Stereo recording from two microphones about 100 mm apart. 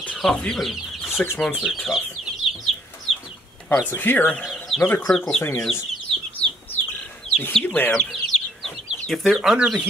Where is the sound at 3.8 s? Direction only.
20° left (ahead or behind).